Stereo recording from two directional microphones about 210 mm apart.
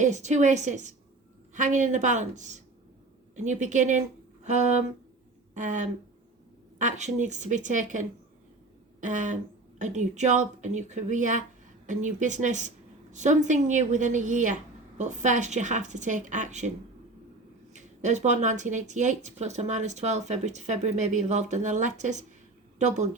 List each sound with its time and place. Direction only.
0.0 s speech: 35° right (ahead or behind)
17.7 s speech: 35° right (ahead or behind)